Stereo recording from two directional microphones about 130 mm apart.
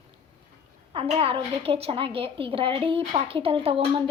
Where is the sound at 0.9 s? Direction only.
45° right (ahead or behind).